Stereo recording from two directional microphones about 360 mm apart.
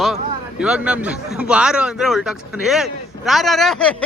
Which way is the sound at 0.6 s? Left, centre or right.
Centre.